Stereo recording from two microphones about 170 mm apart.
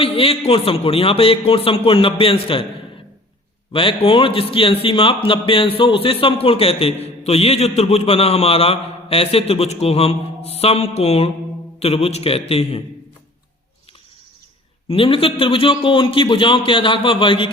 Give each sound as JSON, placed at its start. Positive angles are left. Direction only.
{"t": 0.0, "sound": "a man's voice", "side_deg": 35}
{"t": 3.7, "sound": "a man's voice", "side_deg": 30}
{"t": 14.8, "sound": "a man's voice", "side_deg": 30}